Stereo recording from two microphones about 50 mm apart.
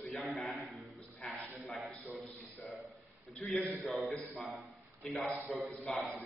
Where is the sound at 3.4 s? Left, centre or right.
Left.